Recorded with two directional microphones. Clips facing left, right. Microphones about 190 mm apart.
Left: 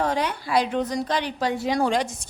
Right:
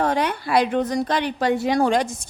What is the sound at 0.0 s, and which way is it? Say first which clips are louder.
A woman's voice: right 3 dB; 60° right (ahead or behind).